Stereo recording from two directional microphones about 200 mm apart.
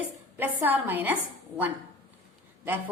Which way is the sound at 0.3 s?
10° right (ahead or behind).